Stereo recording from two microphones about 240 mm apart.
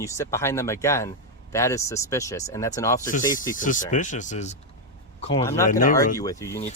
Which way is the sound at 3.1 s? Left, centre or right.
Left.